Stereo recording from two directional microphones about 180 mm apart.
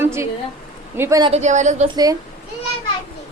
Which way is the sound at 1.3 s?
40° right (ahead or behind).